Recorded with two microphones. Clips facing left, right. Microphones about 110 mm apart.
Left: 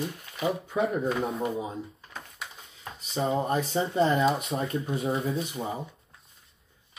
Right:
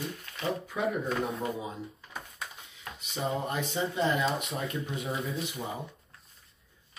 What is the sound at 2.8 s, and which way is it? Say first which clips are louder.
Speech: left 5 dB; 30° left (ahead or behind).